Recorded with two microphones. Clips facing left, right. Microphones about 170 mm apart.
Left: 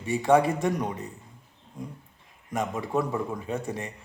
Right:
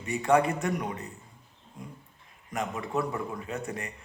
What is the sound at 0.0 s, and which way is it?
Speech, 25° left (ahead or behind).